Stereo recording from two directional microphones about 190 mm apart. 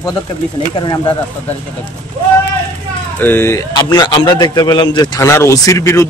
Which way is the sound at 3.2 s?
10° left (ahead or behind).